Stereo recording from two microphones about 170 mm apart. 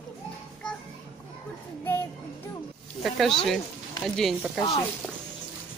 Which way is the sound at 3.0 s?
Centre (ahead or behind).